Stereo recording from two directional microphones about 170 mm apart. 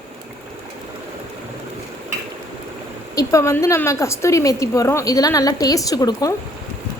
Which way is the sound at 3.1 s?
20° left (ahead or behind).